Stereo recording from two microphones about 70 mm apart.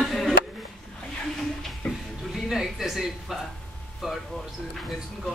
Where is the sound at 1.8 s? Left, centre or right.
Centre.